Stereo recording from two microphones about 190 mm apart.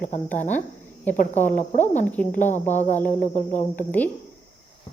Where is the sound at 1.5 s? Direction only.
40° left (ahead or behind).